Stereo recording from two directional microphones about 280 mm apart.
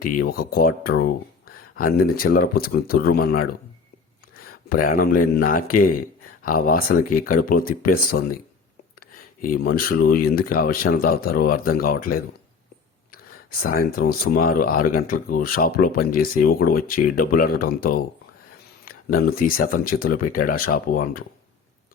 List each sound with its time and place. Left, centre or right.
0.0 s speech: left